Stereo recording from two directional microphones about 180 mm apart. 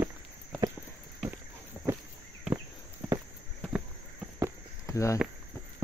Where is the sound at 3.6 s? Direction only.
5° right (ahead or behind).